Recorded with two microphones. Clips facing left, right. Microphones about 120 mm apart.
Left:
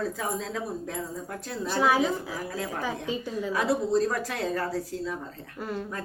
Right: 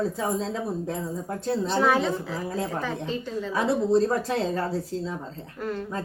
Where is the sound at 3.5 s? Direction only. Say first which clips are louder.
Right 3 dB; 25° right (ahead or behind).